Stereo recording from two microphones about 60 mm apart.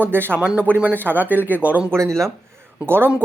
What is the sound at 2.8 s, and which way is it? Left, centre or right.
Speech, right.